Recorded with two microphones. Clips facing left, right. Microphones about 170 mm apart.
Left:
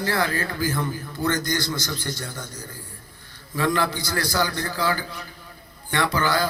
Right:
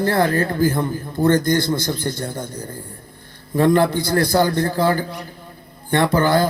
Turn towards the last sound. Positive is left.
turn(degrees=-55)  # may be behind; listen again after turning